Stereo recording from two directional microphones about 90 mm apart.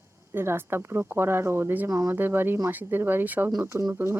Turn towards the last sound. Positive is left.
turn(degrees=-35)  # may be behind; listen again after turning